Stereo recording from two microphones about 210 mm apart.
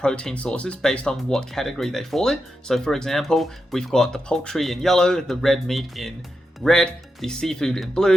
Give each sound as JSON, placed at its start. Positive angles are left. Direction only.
{"t": 0.0, "sound": "speech", "side_deg": 5}